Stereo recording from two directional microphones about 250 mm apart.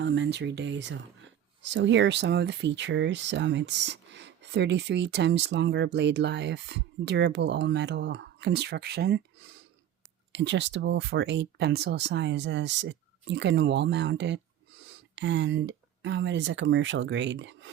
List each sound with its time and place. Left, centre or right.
0.0 s speech: right
10.3 s speech: right